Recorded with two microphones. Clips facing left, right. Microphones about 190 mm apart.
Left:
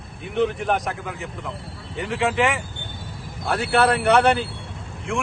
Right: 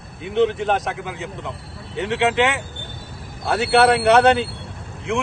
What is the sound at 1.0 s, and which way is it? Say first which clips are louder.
A man's voice: right 2 dB; 25° right (ahead or behind).